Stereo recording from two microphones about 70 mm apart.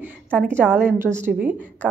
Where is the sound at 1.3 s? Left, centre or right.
Right.